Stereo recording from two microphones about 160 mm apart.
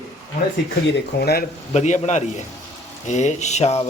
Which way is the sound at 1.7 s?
45° left (ahead or behind).